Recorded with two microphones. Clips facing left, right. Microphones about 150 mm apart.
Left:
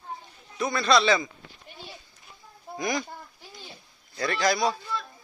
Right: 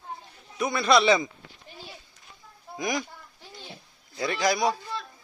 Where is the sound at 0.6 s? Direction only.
15° right (ahead or behind).